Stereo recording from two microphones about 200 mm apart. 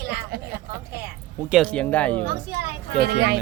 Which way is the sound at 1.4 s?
Centre (ahead or behind).